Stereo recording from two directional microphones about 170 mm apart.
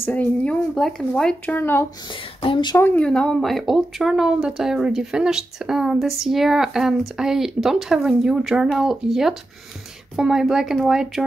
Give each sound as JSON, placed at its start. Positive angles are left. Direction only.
{"t": 0.0, "sound": "speech", "side_deg": 10}
{"t": 2.4, "sound": "speech", "side_deg": 25}
{"t": 2.8, "sound": "speech", "side_deg": 10}